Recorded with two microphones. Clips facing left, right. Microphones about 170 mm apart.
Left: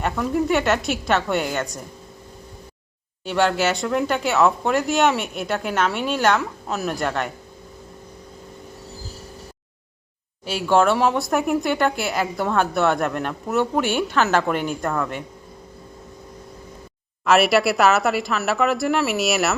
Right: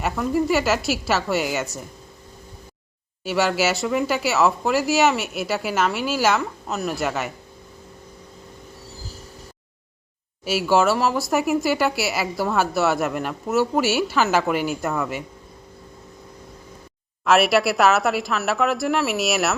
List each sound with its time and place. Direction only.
0.0 s speech: centre (ahead or behind)
3.2 s speech: 5° right (ahead or behind)
10.4 s speech: 5° right (ahead or behind)
17.2 s speech: centre (ahead or behind)